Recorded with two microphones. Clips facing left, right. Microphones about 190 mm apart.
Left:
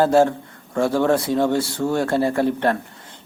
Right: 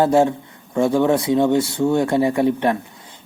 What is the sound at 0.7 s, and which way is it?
Speech, 20° right (ahead or behind).